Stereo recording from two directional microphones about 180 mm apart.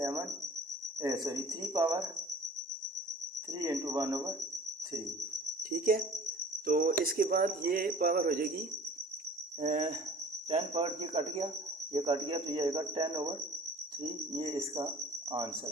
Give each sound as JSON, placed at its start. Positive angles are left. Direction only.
{"t": 0.0, "sound": "cricket", "side_deg": -15}
{"t": 1.0, "sound": "speech", "side_deg": -20}
{"t": 3.6, "sound": "speech", "side_deg": -20}
{"t": 5.7, "sound": "cricket", "side_deg": -55}
{"t": 7.0, "sound": "speech", "side_deg": -55}
{"t": 9.6, "sound": "cricket", "side_deg": -40}
{"t": 11.9, "sound": "speech", "side_deg": -30}